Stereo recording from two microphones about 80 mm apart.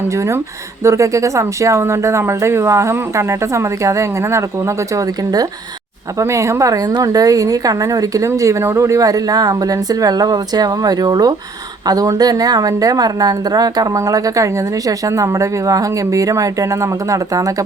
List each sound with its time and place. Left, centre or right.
0.1 s speech: right
6.1 s speech: right